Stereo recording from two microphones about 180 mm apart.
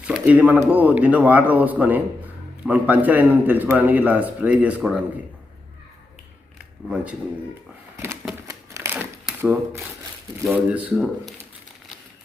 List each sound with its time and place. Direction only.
0.0 s speech: 5° right (ahead or behind)
6.8 s speech: 5° right (ahead or behind)
7.9 s a sound: 15° right (ahead or behind)
8.2 s typewriter: 10° right (ahead or behind)
10.4 s speech: 5° right (ahead or behind)